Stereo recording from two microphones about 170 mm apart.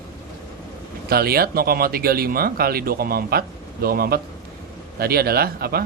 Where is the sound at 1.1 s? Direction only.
65° right (ahead or behind).